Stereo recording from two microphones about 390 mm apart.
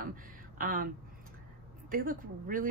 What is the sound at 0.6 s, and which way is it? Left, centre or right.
Speech, right.